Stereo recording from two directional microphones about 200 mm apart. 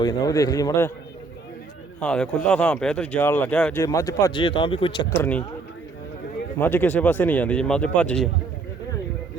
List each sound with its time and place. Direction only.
0.0 s speech: 20° left (ahead or behind)
2.0 s speech: 5° left (ahead or behind); by 5.0 s 25° left (ahead or behind)
6.6 s speech: 10° left (ahead or behind)